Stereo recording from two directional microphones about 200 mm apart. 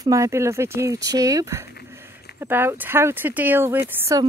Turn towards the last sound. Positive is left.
turn(degrees=-15)  # may be behind; listen again after turning